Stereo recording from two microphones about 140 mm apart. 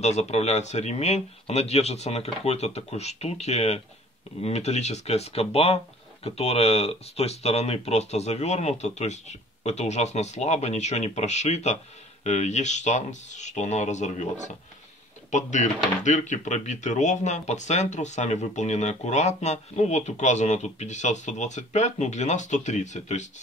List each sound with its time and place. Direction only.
0.0 s speech: 50° left (ahead or behind)